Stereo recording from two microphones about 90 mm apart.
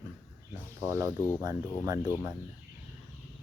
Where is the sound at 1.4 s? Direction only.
40° right (ahead or behind).